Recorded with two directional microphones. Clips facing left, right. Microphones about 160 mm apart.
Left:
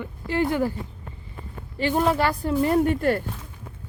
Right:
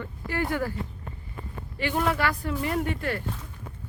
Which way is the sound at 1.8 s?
30° left (ahead or behind).